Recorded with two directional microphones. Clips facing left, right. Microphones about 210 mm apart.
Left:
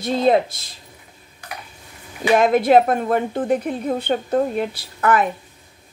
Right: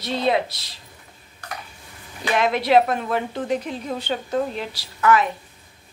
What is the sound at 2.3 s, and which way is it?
A woman's voice, 45° left (ahead or behind).